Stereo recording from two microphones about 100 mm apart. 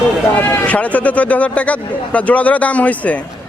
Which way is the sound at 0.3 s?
15° left (ahead or behind).